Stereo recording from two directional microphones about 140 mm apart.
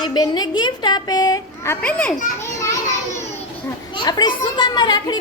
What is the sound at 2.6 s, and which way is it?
Children playing, 20° left (ahead or behind).